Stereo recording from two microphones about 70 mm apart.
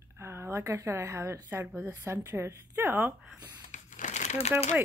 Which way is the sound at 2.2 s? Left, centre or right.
Right.